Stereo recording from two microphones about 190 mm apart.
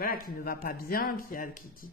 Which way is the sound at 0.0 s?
50° left (ahead or behind).